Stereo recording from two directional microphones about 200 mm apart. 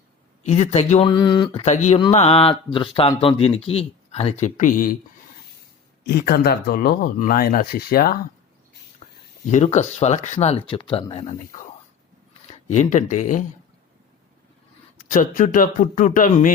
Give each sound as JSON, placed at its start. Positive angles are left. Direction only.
{"t": 0.4, "sound": "speech", "side_deg": 35}
{"t": 6.1, "sound": "speech", "side_deg": 50}
{"t": 9.0, "sound": "writing", "side_deg": 30}
{"t": 9.5, "sound": "speech", "side_deg": 35}
{"t": 12.7, "sound": "speech", "side_deg": 35}
{"t": 14.9, "sound": "speech", "side_deg": 40}